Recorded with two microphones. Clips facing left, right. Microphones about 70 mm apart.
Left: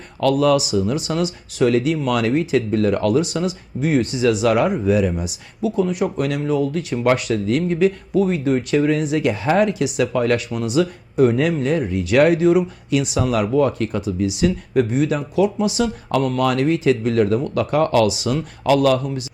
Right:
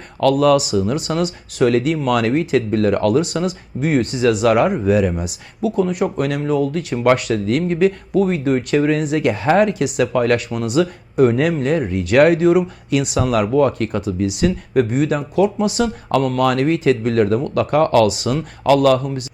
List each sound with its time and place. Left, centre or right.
0.2 s speech: right